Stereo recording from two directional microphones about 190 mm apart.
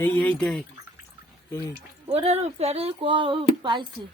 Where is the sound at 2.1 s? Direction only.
30° right (ahead or behind).